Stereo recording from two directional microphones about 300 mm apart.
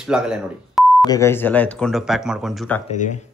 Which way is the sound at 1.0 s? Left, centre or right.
Centre.